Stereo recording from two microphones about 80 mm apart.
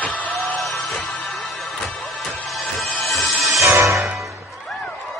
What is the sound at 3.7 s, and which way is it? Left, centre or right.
Music, right.